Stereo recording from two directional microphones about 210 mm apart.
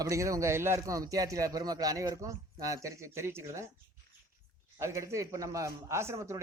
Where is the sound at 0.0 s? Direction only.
15° right (ahead or behind).